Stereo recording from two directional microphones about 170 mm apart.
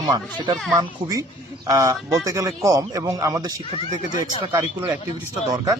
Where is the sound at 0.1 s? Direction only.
25° right (ahead or behind).